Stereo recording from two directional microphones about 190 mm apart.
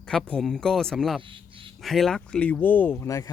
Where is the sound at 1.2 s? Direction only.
25° right (ahead or behind).